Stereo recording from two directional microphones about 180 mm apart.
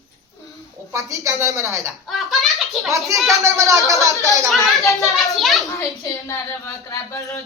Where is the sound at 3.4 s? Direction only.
15° right (ahead or behind).